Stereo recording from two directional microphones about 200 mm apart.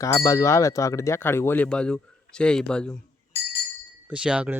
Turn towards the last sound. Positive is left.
turn(degrees=-5)  # may be behind; listen again after turning